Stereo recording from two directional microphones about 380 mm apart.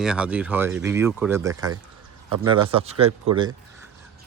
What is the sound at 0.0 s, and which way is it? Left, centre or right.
A man's voice, centre.